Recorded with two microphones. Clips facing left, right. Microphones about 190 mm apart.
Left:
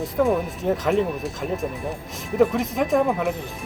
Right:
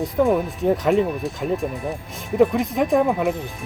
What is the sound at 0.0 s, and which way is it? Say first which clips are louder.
Speech: right 2 dB; centre (ahead or behind).